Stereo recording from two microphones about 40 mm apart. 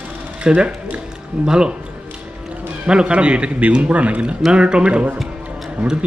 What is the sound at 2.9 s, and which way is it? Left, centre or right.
A man's voice, right.